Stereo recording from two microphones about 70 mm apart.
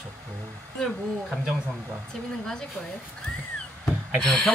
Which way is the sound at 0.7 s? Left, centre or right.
Centre.